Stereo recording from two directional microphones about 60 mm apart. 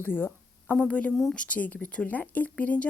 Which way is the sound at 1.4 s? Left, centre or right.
Left.